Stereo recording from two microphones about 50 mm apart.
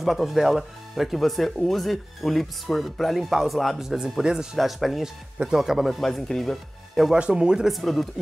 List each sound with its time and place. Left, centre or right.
0.0 s speech: centre
4.2 s speech: centre
4.6 s speech: centre
5.9 s speech: centre
7.2 s speech: centre
7.7 s speech: centre